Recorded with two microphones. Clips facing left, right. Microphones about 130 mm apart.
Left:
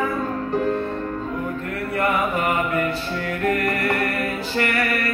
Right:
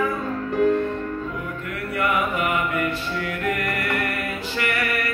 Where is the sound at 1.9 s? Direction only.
35° left (ahead or behind).